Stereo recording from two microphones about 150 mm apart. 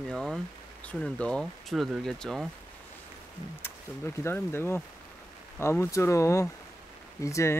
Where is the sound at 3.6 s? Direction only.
15° left (ahead or behind).